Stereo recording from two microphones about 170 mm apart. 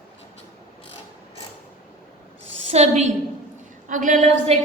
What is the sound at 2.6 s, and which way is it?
A woman's voice, 40° right (ahead or behind).